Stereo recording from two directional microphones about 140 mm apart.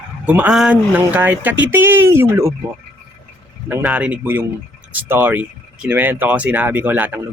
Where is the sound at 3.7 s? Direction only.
15° right (ahead or behind).